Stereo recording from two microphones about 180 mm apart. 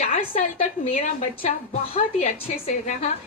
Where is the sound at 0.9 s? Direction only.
40° left (ahead or behind).